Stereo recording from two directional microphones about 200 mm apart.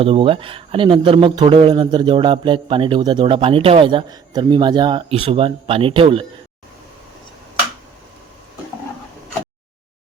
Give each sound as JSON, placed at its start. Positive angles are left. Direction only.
{"t": 0.0, "sound": "speech", "side_deg": -25}